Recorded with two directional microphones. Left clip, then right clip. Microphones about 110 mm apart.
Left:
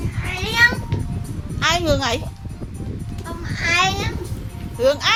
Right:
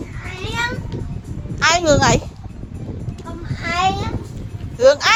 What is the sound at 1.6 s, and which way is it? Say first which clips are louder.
Speech: right 5 dB; 50° right (ahead or behind).